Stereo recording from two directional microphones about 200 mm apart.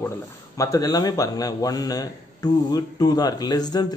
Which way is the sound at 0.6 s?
15° left (ahead or behind).